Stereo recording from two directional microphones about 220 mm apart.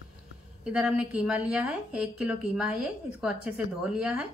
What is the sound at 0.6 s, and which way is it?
A woman's voice, 5° right (ahead or behind).